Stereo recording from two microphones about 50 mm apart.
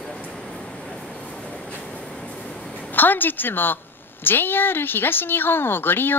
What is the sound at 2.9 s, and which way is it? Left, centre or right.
A woman's voice, left.